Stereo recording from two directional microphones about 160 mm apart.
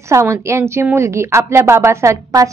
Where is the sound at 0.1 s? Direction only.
15° right (ahead or behind).